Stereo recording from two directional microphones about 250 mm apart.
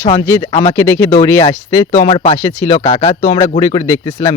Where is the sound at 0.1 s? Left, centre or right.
Centre.